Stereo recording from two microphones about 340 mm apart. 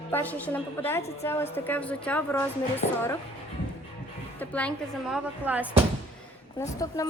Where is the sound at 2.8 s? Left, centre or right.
Left.